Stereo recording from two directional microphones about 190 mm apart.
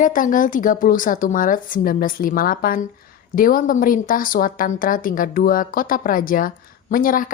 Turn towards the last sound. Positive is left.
turn(degrees=45)  # may be behind; listen again after turning